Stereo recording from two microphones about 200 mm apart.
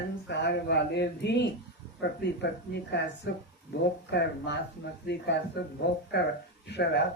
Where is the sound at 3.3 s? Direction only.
55° left (ahead or behind).